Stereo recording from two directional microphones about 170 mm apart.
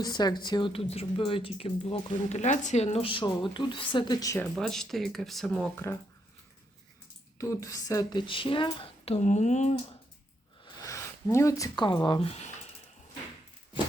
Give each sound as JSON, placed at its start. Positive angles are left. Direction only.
{"t": 0.0, "sound": "a woman's voice", "side_deg": 25}
{"t": 4.5, "sound": "speech", "side_deg": 0}
{"t": 7.3, "sound": "speech", "side_deg": 20}
{"t": 8.3, "sound": "a woman's voice", "side_deg": 30}
{"t": 10.8, "sound": "speech", "side_deg": 15}